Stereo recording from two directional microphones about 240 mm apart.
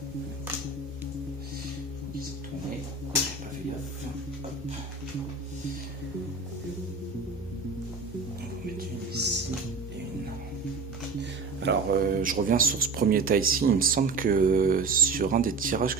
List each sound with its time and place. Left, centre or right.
9.1 s music: right
11.2 s speech: right